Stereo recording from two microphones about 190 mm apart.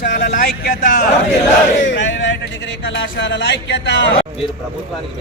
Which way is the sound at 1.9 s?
70° left (ahead or behind).